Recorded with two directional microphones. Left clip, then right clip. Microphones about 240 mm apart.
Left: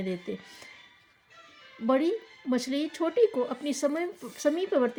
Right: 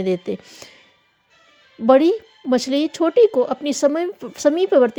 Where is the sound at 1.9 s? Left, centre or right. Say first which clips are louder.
Right 12 dB; right.